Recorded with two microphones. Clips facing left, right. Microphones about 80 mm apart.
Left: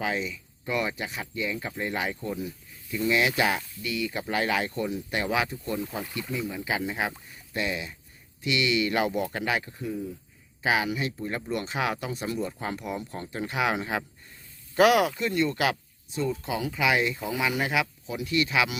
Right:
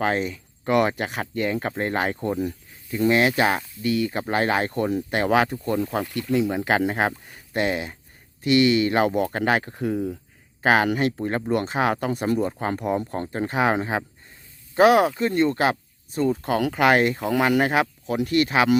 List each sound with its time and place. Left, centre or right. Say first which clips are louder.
0.0 s speech: right 6 dB; right
6.3 s speech: right 10 dB; right
10.6 s speech: right 7 dB; right